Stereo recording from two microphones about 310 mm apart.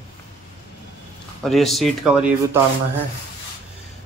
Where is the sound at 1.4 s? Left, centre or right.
Centre.